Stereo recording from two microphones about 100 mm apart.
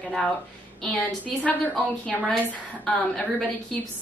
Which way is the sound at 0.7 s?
10° left (ahead or behind).